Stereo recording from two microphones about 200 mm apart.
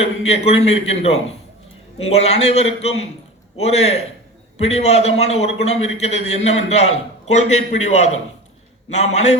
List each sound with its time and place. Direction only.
0.3 s a man's voice: 30° left (ahead or behind)